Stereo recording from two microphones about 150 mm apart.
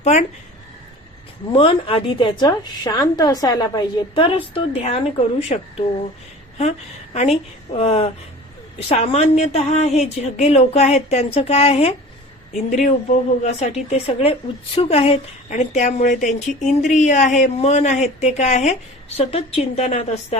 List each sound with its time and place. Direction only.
0.0 s a sound: 50° left (ahead or behind)
1.5 s a woman's voice: 40° left (ahead or behind)
13.4 s a woman's voice: 50° left (ahead or behind)